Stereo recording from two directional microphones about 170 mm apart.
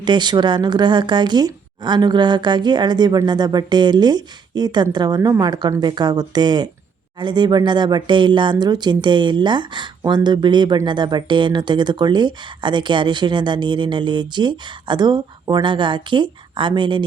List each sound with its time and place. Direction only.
0.0 s speech: 25° right (ahead or behind)